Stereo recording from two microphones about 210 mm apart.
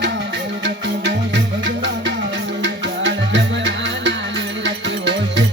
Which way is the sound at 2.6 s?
60° right (ahead or behind).